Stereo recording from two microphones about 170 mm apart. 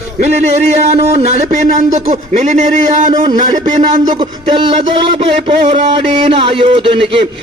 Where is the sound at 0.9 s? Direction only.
45° right (ahead or behind).